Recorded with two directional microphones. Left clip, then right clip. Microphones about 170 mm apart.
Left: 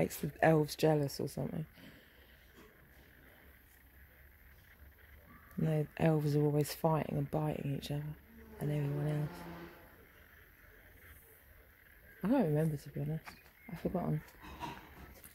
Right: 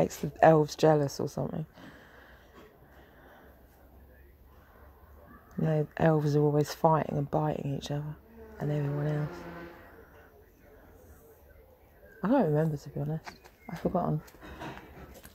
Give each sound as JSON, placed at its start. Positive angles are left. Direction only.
{"t": 0.0, "sound": "speech", "side_deg": 15}
{"t": 5.6, "sound": "speech", "side_deg": 10}
{"t": 12.2, "sound": "speech", "side_deg": 15}